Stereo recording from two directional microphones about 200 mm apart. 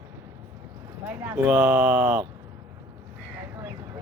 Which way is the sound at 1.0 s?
10° right (ahead or behind).